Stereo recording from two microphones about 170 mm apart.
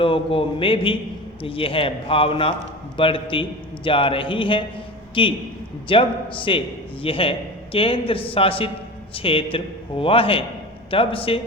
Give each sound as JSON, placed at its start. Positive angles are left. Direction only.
{"t": 0.0, "sound": "a man's voice", "side_deg": 30}